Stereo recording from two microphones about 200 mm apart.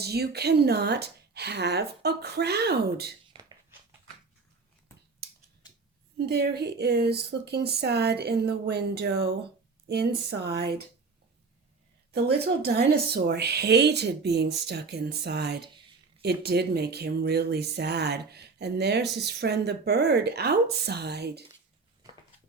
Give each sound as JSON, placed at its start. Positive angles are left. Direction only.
{"t": 0.0, "sound": "speech", "side_deg": -55}
{"t": 3.3, "sound": "a sound", "side_deg": -25}
{"t": 6.1, "sound": "speech", "side_deg": -55}
{"t": 12.1, "sound": "speech", "side_deg": -55}